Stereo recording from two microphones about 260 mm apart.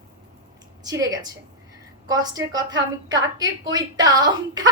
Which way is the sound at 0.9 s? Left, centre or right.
Centre.